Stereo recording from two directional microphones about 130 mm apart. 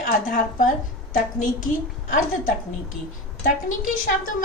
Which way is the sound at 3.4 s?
75° left (ahead or behind).